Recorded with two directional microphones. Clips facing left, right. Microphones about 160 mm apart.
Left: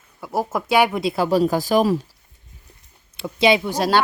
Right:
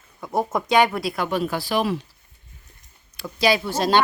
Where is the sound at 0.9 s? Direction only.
25° left (ahead or behind).